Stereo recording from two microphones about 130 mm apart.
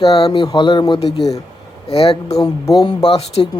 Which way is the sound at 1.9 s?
50° left (ahead or behind).